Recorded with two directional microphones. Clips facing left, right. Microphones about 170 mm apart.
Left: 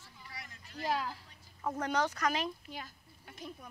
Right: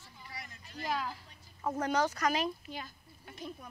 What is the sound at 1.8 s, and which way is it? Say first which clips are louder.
Speech: right 2 dB; 5° right (ahead or behind).